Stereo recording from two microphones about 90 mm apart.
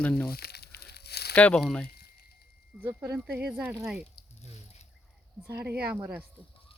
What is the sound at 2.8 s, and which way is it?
Speech, 25° right (ahead or behind).